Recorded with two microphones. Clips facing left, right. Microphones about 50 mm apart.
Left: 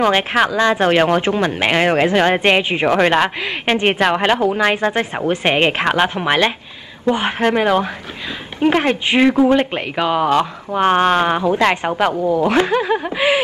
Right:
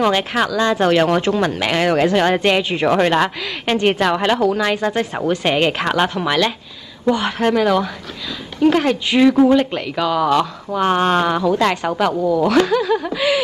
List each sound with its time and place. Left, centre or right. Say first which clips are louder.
0.0 s speech: left 2 dB; left